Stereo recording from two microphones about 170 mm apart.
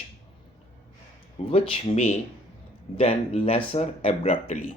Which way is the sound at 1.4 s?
35° left (ahead or behind).